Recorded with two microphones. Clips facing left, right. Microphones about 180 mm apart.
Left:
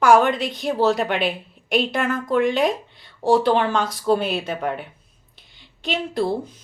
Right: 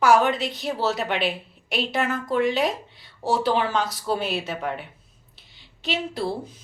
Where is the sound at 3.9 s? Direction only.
50° left (ahead or behind).